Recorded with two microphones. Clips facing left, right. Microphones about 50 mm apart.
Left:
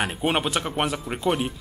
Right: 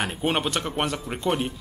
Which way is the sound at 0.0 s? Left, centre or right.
Centre.